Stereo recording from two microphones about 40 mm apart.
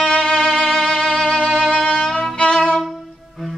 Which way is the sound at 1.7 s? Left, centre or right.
Left.